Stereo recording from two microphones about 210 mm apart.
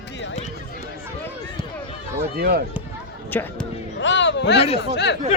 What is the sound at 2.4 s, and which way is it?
Speech, 50° right (ahead or behind).